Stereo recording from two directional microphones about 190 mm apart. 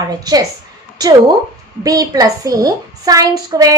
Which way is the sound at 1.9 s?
20° right (ahead or behind).